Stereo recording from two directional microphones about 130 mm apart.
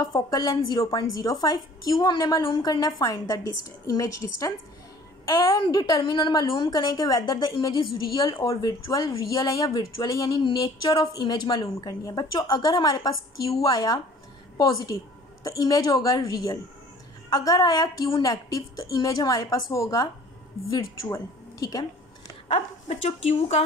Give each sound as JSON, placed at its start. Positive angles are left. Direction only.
{"t": 0.0, "sound": "a woman's voice", "side_deg": 30}
{"t": 22.5, "sound": "a woman's voice", "side_deg": 55}